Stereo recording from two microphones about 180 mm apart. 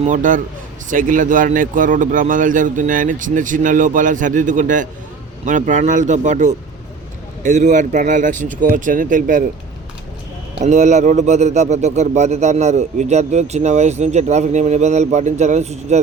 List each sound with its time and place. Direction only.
0.1 s a man's voice: 45° right (ahead or behind)
10.6 s a man's voice: 40° right (ahead or behind)